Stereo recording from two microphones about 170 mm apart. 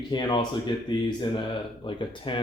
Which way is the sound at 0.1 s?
25° left (ahead or behind).